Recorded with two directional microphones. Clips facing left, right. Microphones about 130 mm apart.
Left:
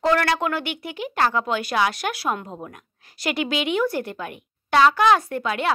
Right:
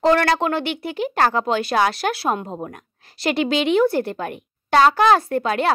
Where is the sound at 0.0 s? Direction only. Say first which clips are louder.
Right 4 dB; 30° right (ahead or behind).